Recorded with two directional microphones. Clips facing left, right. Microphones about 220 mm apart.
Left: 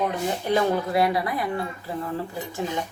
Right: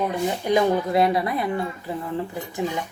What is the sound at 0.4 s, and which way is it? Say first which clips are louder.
A woman's voice: right 3 dB; 20° right (ahead or behind).